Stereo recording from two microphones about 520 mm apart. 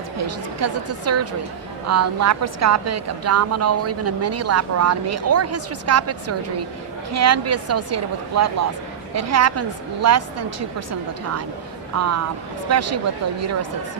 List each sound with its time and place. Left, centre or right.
0.3 s a woman's voice: right
11.9 s a woman's voice: right